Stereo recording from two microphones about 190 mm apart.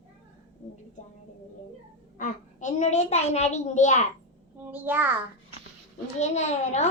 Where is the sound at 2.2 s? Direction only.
40° left (ahead or behind).